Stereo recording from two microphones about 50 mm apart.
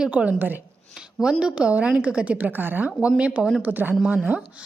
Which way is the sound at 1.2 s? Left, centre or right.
Centre.